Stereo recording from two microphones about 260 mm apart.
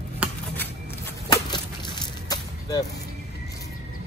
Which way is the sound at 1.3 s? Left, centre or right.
Centre.